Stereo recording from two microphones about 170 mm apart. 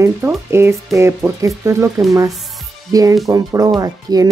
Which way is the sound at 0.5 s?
15° right (ahead or behind).